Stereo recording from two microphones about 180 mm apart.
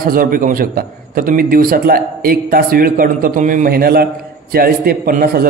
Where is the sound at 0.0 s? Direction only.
55° right (ahead or behind).